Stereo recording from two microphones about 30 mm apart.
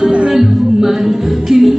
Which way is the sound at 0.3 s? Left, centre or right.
Centre.